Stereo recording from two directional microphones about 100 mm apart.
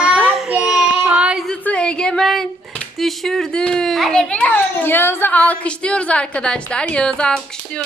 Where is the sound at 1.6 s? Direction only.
10° left (ahead or behind).